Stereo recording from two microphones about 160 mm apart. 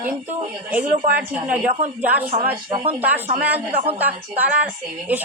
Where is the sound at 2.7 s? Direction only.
35° right (ahead or behind).